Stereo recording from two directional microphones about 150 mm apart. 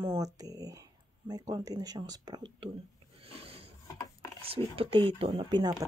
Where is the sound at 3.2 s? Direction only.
40° right (ahead or behind).